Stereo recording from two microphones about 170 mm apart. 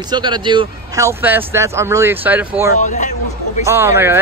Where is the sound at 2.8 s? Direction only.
45° left (ahead or behind).